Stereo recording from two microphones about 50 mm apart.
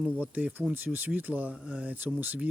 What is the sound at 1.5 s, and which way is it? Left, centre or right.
Speech, right.